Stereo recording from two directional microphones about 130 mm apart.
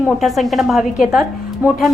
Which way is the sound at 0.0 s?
Centre (ahead or behind).